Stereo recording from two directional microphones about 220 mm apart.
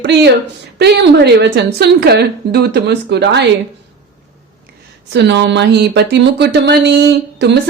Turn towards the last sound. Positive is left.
turn(degrees=-50)  # may be behind; listen again after turning